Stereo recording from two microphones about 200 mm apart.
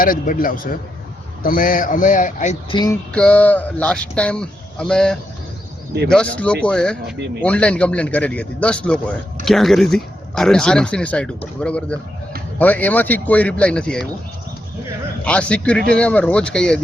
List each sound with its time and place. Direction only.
0.0 s a man's voice: 45° left (ahead or behind)
2.6 s speech: 20° left (ahead or behind)
3.1 s speech: 5° left (ahead or behind)
15.2 s speech: 5° left (ahead or behind)